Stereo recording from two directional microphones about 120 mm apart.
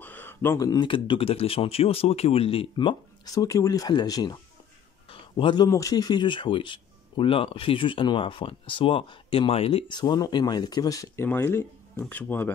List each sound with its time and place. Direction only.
0.0 s a sound: 15° left (ahead or behind)
0.6 s speech: 30° left (ahead or behind)
0.8 s speech: 45° left (ahead or behind)
3.3 s speech: 30° left (ahead or behind)
5.1 s a sound: 45° left (ahead or behind)
5.7 s speech: 30° left (ahead or behind)
11.2 s speech: 20° left (ahead or behind)